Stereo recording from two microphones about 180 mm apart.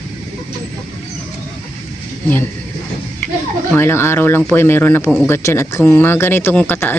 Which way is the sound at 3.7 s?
15° left (ahead or behind).